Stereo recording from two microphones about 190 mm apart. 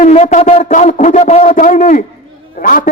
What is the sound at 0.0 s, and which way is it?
A man's voice, 40° left (ahead or behind).